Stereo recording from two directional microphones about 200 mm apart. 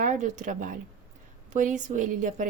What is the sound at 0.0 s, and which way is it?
A woman's voice, 35° right (ahead or behind).